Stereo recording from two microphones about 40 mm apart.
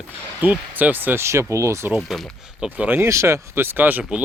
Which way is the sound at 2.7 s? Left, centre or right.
Right.